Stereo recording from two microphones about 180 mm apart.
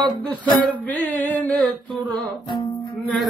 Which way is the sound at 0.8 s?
10° left (ahead or behind).